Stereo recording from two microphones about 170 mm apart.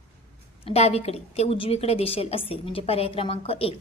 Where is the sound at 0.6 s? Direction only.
35° left (ahead or behind).